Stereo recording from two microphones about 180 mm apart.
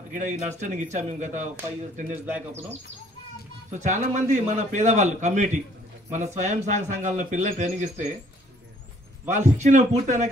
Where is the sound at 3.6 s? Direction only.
40° right (ahead or behind).